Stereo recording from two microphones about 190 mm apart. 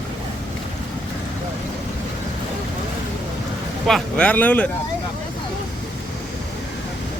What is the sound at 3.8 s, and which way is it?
Speech, 5° left (ahead or behind).